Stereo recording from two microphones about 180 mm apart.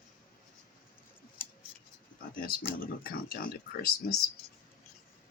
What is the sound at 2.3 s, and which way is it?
Speech, 50° left (ahead or behind).